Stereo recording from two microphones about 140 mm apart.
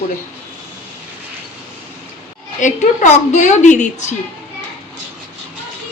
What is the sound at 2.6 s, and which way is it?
A woman's voice, 60° left (ahead or behind).